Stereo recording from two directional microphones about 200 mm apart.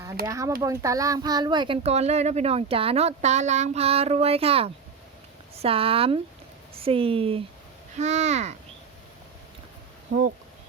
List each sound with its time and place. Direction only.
0.3 s a child's voice: 15° right (ahead or behind); by 8.5 s 35° right (ahead or behind)